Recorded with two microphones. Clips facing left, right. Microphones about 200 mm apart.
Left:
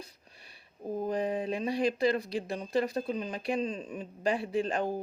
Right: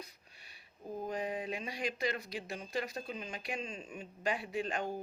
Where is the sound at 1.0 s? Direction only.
35° left (ahead or behind).